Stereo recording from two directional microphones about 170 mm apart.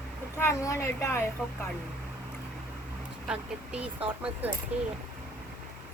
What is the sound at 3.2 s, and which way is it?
Speech, 5° right (ahead or behind).